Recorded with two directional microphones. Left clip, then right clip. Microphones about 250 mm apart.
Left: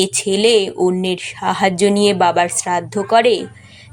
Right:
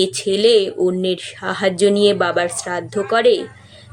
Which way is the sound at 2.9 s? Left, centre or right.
Left.